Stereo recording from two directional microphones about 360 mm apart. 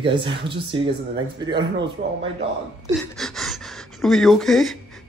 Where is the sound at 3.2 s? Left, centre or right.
Centre.